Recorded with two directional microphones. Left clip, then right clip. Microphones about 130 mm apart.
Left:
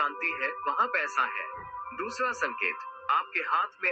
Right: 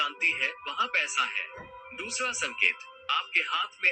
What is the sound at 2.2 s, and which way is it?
Speech, 40° left (ahead or behind).